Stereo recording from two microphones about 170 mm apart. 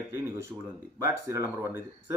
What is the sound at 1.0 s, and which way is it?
Speech, 15° right (ahead or behind).